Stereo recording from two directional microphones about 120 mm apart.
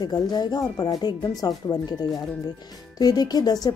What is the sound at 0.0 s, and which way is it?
Speech, 35° left (ahead or behind).